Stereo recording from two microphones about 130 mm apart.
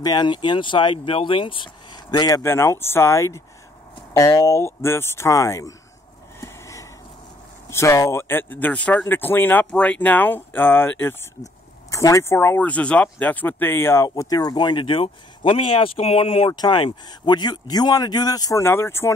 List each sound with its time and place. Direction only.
0.0 s speech: 35° left (ahead or behind)
6.4 s a sound: 25° left (ahead or behind)
7.7 s speech: 20° left (ahead or behind)